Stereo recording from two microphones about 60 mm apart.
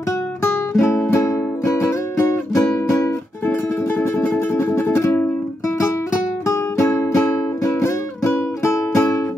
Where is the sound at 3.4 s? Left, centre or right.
Left.